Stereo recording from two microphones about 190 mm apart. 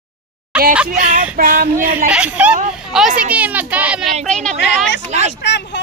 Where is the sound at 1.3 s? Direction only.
50° right (ahead or behind).